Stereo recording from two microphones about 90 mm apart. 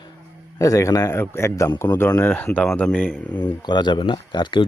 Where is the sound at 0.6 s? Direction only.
40° left (ahead or behind); by 3.5 s 15° left (ahead or behind).